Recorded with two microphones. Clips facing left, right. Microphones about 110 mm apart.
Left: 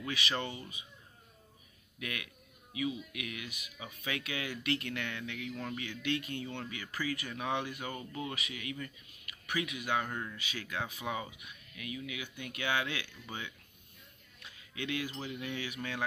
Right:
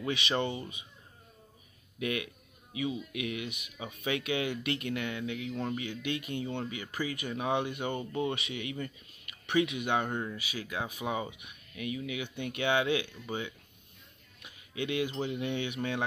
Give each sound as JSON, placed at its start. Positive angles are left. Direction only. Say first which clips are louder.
{"t": 0.0, "sound": "speech", "louder": "right 5 dB", "side_deg": -20}
{"t": 2.0, "sound": "speech", "louder": "right 9 dB", "side_deg": -25}
{"t": 10.4, "sound": "speech", "louder": "right 2 dB", "side_deg": -10}